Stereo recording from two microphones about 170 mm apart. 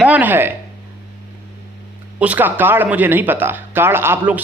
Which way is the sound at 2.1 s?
10° right (ahead or behind).